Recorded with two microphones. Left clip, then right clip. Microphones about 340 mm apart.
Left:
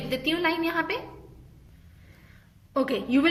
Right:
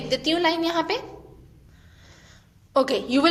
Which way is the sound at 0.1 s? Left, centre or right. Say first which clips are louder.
Right 4 dB; centre.